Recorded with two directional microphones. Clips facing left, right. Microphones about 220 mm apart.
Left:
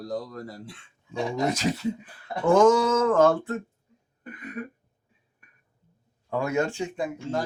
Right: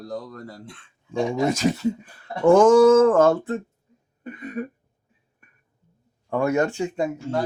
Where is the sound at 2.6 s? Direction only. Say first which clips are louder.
Right 6 dB; 50° right (ahead or behind).